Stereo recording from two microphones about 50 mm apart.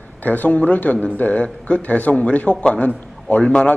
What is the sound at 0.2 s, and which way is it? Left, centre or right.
A man's voice, left.